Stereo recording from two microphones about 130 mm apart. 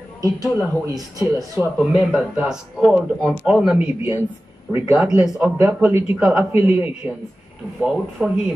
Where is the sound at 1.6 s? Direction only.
5° right (ahead or behind).